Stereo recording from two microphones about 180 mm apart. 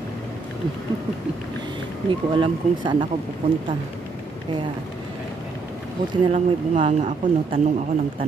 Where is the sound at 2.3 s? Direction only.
25° right (ahead or behind).